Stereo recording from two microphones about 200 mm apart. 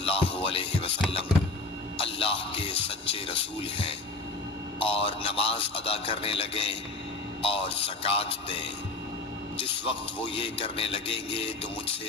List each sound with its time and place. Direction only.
0.0 s music: 25° left (ahead or behind)
2.0 s music: 30° left (ahead or behind)
4.8 s a man's voice: 25° left (ahead or behind)
9.6 s a man's voice: 25° left (ahead or behind)